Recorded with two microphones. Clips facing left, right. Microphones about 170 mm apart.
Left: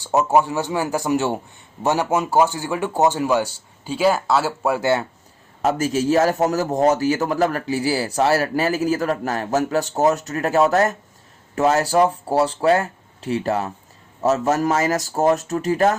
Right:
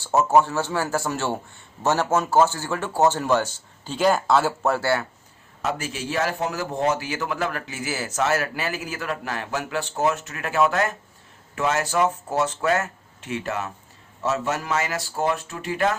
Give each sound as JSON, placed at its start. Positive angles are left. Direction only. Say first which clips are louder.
{"t": 0.0, "sound": "speech", "louder": "left 1 dB", "side_deg": 15}
{"t": 5.6, "sound": "speech", "louder": "left 9 dB", "side_deg": 40}